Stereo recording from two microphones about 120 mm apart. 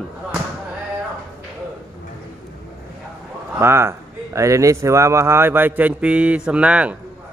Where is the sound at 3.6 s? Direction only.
20° right (ahead or behind).